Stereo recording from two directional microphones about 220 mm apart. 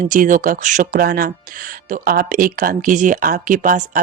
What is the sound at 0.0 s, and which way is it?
Speech, 35° right (ahead or behind).